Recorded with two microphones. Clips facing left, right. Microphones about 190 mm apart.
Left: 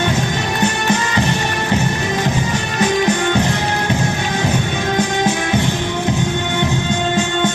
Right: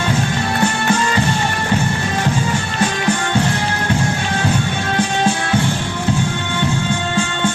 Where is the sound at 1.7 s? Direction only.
20° left (ahead or behind).